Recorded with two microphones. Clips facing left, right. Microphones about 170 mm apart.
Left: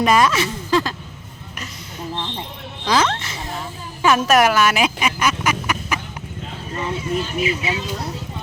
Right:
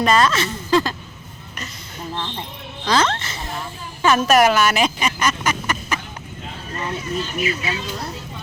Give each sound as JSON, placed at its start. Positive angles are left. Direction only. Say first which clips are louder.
{"t": 0.0, "sound": "speech", "louder": "left 1 dB", "side_deg": 10}
{"t": 0.7, "sound": "a sound", "louder": "right 2 dB", "side_deg": 0}
{"t": 2.8, "sound": "speech", "louder": "even", "side_deg": 10}
{"t": 6.7, "sound": "speech", "louder": "left 2 dB", "side_deg": 25}